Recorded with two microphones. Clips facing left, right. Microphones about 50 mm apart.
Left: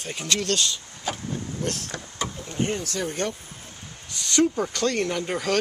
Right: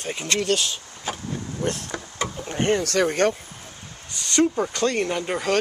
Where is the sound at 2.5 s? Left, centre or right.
Right.